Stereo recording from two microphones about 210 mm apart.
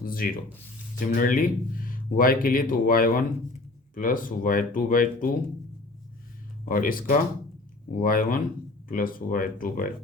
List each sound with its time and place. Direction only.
0.0 s speech: 45° left (ahead or behind)
6.7 s speech: 40° left (ahead or behind)